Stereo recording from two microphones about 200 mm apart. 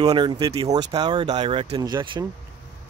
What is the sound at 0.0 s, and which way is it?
Speech, 20° right (ahead or behind).